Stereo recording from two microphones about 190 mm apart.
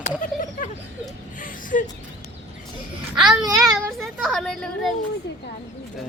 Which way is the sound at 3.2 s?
20° right (ahead or behind).